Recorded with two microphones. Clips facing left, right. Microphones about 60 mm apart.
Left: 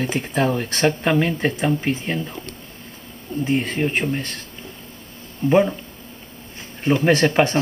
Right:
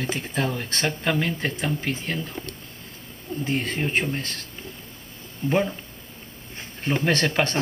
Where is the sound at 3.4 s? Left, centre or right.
Centre.